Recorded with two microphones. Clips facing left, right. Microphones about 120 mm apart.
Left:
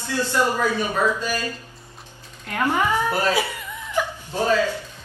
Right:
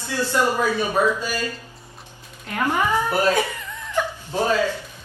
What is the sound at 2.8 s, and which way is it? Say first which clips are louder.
Speech: right 1 dB; 15° right (ahead or behind).